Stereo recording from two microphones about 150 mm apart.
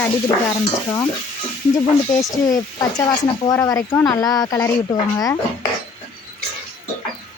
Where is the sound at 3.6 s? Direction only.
20° left (ahead or behind).